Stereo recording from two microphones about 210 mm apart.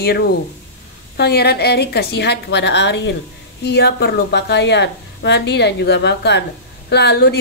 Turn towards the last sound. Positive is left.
turn(degrees=50)  # may be behind; listen again after turning